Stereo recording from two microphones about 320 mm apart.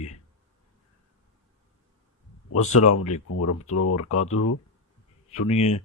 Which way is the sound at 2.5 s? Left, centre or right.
Left.